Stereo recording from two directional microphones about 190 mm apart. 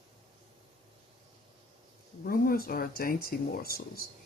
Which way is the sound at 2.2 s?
50° left (ahead or behind).